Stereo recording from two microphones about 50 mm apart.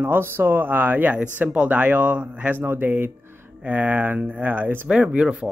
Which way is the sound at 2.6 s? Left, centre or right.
Right.